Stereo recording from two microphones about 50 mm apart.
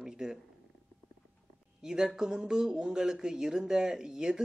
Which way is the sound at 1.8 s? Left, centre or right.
Centre.